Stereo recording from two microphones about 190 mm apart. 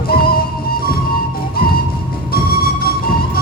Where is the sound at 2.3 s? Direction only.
50° left (ahead or behind).